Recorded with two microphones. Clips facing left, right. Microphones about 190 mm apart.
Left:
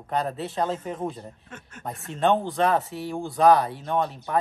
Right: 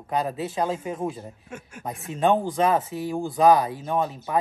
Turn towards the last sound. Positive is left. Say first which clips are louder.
# even
turn(degrees=0)  # may be behind; listen again after turning